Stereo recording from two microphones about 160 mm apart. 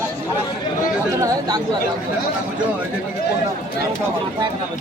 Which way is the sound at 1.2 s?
25° right (ahead or behind).